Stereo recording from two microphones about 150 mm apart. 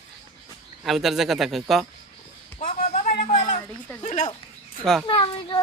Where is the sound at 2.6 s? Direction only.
60° left (ahead or behind).